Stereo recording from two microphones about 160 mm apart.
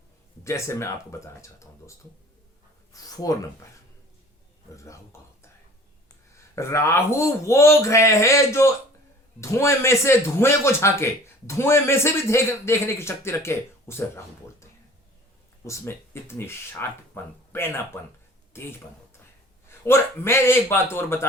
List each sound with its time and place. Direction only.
0.4 s a man's voice: 15° left (ahead or behind)
2.9 s speech: 25° left (ahead or behind)
5.1 s speech: 15° left (ahead or behind)
6.3 s a man's voice: 20° left (ahead or behind)
15.6 s a man's voice: 15° left (ahead or behind)
19.6 s a man's voice: 15° left (ahead or behind)